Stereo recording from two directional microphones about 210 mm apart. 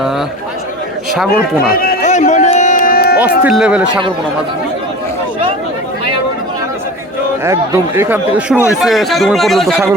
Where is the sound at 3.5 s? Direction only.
5° right (ahead or behind).